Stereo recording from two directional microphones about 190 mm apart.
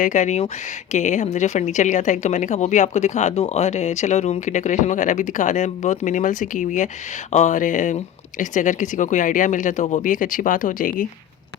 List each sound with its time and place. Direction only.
0.0 s a woman's voice: 40° left (ahead or behind)